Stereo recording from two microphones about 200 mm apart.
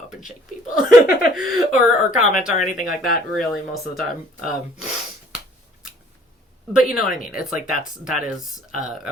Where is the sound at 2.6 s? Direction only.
40° left (ahead or behind).